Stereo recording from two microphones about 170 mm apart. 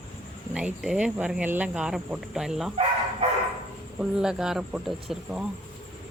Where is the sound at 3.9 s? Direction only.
5° right (ahead or behind).